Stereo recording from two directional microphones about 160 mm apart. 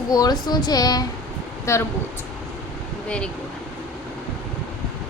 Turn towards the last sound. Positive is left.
turn(degrees=5)  # may be behind; listen again after turning